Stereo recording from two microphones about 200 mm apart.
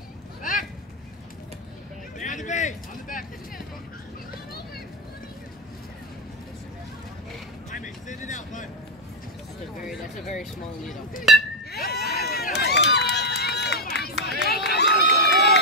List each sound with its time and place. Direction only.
0.4 s a sound: 40° left (ahead or behind)
2.1 s a sound: 40° left (ahead or behind)
7.7 s vehicle: 40° left (ahead or behind)
11.3 s chink: centre (ahead or behind)
11.7 s horse: 50° left (ahead or behind)
12.1 s run: 50° left (ahead or behind)